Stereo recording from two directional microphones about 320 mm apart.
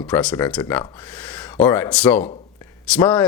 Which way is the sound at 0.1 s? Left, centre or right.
Centre.